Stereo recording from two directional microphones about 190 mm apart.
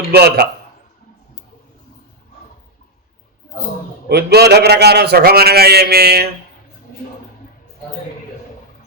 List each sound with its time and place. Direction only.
0.1 s a man's voice: 55° right (ahead or behind)
4.1 s a man's voice: 60° right (ahead or behind)